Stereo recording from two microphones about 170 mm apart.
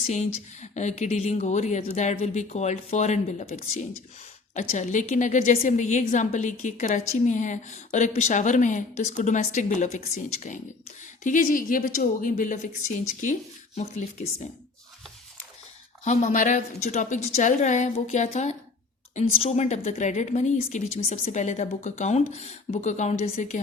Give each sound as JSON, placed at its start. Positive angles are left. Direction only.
{"t": 0.1, "sound": "a woman's voice", "side_deg": 45}
{"t": 11.2, "sound": "a woman's voice", "side_deg": 50}
{"t": 13.7, "sound": "speech", "side_deg": 40}
{"t": 16.0, "sound": "a woman's voice", "side_deg": 45}